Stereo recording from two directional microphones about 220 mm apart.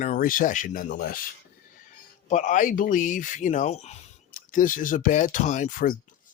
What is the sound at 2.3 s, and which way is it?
Speech, 35° left (ahead or behind).